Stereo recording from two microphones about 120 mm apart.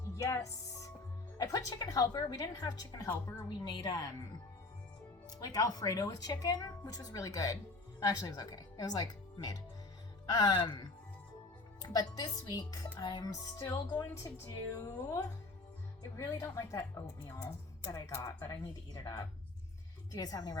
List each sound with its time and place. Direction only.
0.2 s a woman's voice: 25° left (ahead or behind)
5.4 s a woman's voice: 30° left (ahead or behind)
11.8 s a woman's voice: 30° left (ahead or behind)
20.1 s a woman's voice: 30° left (ahead or behind)